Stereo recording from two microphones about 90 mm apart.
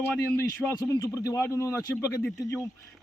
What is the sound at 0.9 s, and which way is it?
A man's voice, 40° left (ahead or behind).